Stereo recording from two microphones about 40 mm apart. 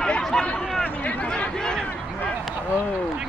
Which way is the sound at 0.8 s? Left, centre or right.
Left.